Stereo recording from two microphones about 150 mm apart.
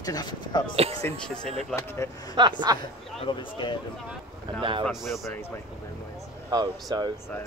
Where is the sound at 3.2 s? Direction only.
30° left (ahead or behind).